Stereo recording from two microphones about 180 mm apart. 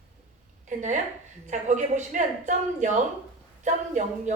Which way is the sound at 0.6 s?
45° right (ahead or behind).